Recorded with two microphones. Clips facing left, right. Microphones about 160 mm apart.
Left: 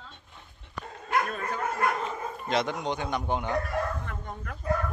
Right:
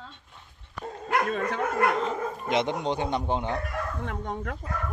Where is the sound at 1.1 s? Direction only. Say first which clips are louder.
Right 3 dB; 80° right.